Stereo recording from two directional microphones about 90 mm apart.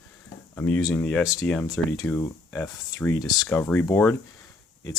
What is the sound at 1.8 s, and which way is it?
Speech, 15° left (ahead or behind).